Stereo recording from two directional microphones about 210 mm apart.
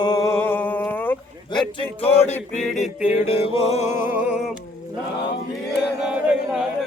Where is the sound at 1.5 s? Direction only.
25° left (ahead or behind).